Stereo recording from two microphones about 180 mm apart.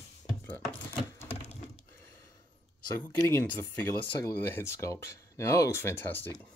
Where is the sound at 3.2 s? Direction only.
10° left (ahead or behind).